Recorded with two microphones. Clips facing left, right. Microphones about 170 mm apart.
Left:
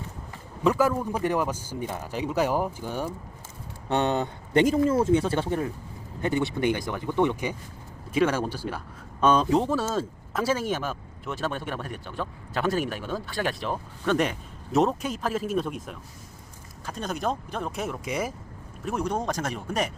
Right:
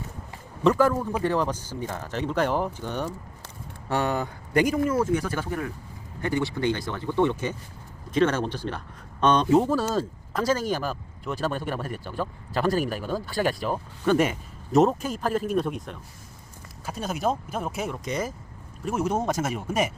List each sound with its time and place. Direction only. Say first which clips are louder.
0.6 s speech: right 2 dB; 5° left (ahead or behind)
3.8 s speech: left 1 dB; 20° left (ahead or behind)
18.9 s speech: right 2 dB; 5° right (ahead or behind)